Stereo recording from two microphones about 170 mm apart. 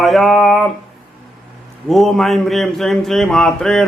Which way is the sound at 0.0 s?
Centre (ahead or behind).